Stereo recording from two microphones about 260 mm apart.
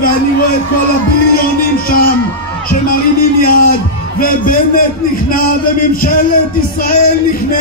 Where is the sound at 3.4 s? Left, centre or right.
Left.